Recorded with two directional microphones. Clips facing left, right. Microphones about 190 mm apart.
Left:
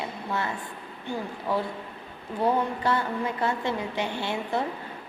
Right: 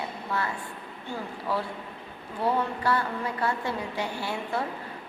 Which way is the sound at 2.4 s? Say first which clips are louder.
Left 2 dB; 20° left (ahead or behind).